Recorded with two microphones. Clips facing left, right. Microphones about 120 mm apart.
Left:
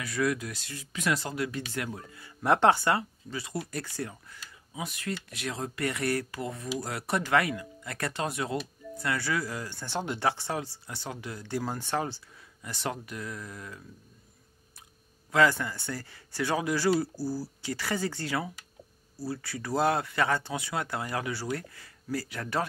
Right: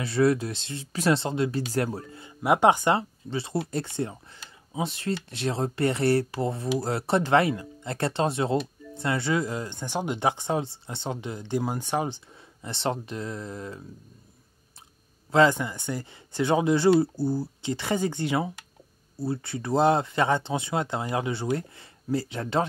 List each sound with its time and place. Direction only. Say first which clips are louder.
0.0 s speech: right 7 dB; 30° right (ahead or behind)
1.7 s speech: right 8 dB; 35° right (ahead or behind)
2.2 s speech: right 2 dB; 15° right (ahead or behind)
3.0 s speech: right 5 dB; 30° right (ahead or behind)
12.6 s speech: right 6 dB; 25° right (ahead or behind)
15.3 s speech: right 4 dB; 20° right (ahead or behind)